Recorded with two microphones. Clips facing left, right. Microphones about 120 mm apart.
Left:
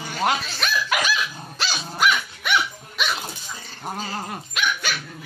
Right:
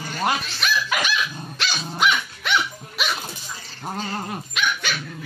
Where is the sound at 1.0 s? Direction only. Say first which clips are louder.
Even; 35° left (ahead or behind).